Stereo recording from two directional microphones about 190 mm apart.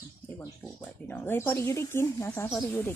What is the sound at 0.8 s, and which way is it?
Speech, 10° left (ahead or behind).